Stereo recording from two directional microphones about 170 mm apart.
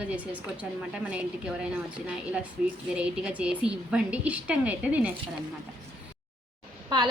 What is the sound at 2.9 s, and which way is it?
A woman's voice, 5° right (ahead or behind).